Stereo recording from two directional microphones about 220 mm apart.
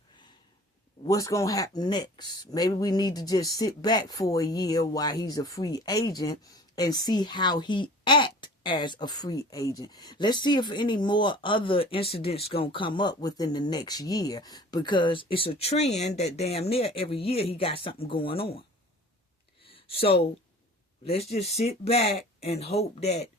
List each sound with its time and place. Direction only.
1.0 s speech: 15° left (ahead or behind)
19.6 s a sound: 25° left (ahead or behind)
21.0 s speech: 25° left (ahead or behind)